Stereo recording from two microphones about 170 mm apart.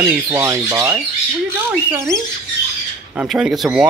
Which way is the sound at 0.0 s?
15° right (ahead or behind).